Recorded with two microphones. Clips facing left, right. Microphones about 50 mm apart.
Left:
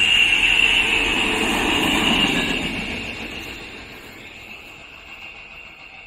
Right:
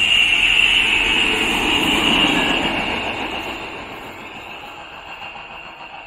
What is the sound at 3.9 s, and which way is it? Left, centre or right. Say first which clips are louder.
Vehicle: right 6 dB; centre.